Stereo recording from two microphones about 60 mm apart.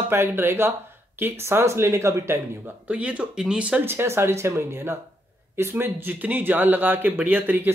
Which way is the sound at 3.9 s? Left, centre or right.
Right.